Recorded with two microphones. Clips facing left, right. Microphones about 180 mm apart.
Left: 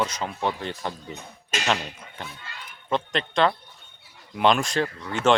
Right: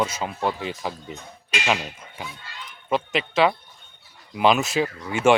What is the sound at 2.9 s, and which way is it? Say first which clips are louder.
Speech: right 2 dB; 5° right (ahead or behind).